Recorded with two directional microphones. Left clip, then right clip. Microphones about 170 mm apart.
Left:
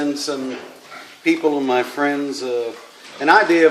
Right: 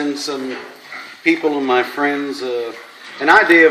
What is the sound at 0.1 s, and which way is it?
A man's voice, 20° left (ahead or behind).